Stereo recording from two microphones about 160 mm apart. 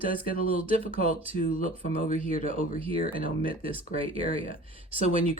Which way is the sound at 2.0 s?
55° left (ahead or behind).